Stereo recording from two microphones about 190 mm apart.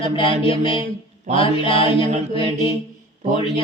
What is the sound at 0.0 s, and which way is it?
Mantra, 25° left (ahead or behind).